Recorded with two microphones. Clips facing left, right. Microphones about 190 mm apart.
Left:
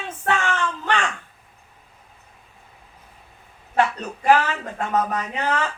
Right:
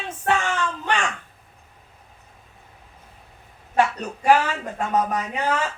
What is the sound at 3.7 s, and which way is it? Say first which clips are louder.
A man's voice: even; 10° right (ahead or behind).